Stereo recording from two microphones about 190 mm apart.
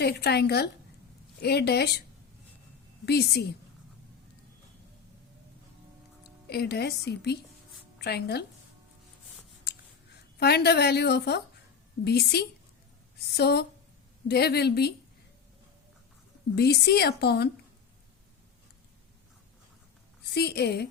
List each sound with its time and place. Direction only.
0.0 s a woman's voice: 55° left (ahead or behind)
3.1 s a woman's voice: 60° left (ahead or behind)
6.5 s a woman's voice: 55° left (ahead or behind)
10.4 s a woman's voice: 60° left (ahead or behind)
16.6 s a woman's voice: 60° left (ahead or behind)
20.3 s a woman's voice: 60° left (ahead or behind)